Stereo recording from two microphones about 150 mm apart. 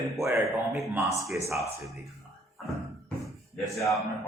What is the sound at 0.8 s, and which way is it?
Speech, centre (ahead or behind).